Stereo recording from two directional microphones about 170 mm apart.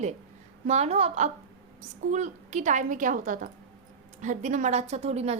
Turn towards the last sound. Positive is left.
turn(degrees=-40)  # may be behind; listen again after turning